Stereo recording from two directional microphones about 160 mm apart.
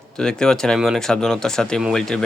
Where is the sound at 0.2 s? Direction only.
5° left (ahead or behind).